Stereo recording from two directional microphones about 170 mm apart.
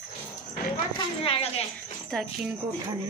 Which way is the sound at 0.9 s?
35° left (ahead or behind).